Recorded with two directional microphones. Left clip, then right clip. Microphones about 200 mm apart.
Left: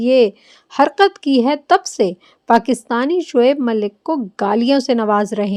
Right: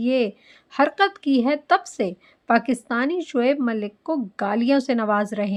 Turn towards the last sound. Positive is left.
turn(degrees=30)  # may be behind; listen again after turning